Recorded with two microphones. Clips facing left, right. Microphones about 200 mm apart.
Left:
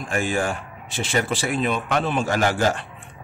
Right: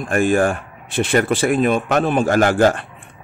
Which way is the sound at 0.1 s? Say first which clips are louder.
Right 8 dB; 55° right (ahead or behind).